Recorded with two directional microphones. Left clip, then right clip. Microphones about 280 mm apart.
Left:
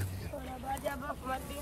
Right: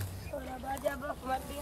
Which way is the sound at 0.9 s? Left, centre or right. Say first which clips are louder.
Right 2 dB; right.